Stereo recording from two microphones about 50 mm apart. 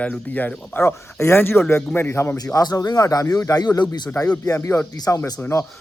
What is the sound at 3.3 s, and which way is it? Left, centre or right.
Speech, left.